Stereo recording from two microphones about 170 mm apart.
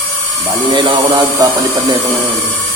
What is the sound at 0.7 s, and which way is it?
Speech, 30° right (ahead or behind).